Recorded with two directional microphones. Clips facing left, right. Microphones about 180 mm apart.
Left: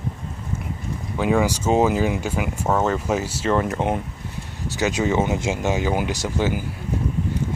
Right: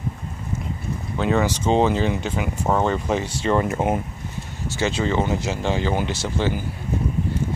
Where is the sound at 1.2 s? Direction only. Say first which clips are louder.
Left 1 dB; 10° left (ahead or behind).